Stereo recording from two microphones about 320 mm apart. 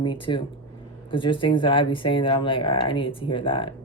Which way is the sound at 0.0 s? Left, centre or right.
Centre.